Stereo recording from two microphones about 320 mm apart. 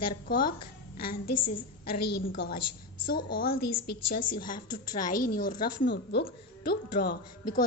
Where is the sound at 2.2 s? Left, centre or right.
Left.